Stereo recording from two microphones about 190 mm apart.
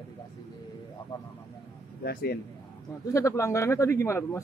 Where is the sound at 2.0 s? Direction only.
55° left (ahead or behind).